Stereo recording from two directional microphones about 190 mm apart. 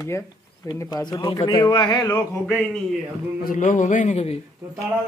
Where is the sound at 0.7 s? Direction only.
20° left (ahead or behind).